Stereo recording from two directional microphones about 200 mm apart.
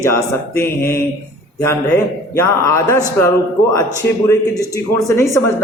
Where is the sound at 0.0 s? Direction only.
15° left (ahead or behind).